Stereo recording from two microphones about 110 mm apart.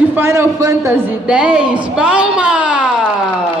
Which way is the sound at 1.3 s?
10° right (ahead or behind).